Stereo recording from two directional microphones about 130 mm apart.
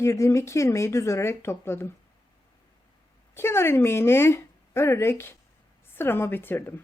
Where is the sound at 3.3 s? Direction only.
20° left (ahead or behind).